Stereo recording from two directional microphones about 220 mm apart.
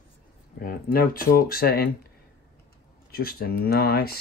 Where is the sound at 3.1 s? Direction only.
45° left (ahead or behind).